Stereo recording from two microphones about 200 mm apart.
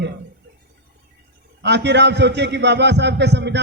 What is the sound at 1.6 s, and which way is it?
A man's voice, 60° right (ahead or behind).